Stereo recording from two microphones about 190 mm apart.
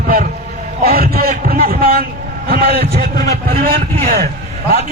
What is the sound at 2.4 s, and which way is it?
A man's voice, 55° right (ahead or behind).